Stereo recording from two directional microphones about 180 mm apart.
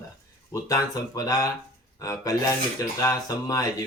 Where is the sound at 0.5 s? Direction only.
20° left (ahead or behind).